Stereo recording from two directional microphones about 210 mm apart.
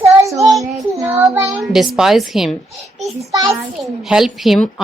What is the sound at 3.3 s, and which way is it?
Speech, 15° right (ahead or behind).